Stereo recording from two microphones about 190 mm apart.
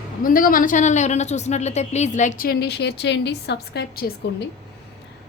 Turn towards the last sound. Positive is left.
turn(degrees=55)  # may be behind; listen again after turning